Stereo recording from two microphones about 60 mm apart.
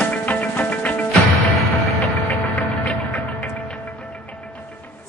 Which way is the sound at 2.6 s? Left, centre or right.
Left.